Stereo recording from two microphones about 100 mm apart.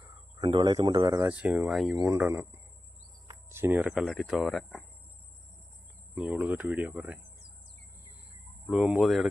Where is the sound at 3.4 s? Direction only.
25° right (ahead or behind).